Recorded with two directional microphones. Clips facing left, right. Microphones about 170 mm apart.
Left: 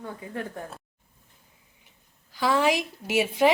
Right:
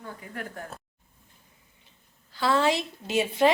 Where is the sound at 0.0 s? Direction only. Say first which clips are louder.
Left 4 dB; 25° left (ahead or behind).